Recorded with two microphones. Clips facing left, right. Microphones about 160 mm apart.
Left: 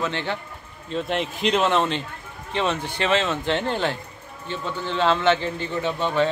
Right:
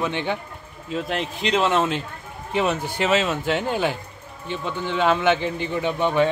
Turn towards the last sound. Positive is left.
turn(degrees=-15)  # may be behind; listen again after turning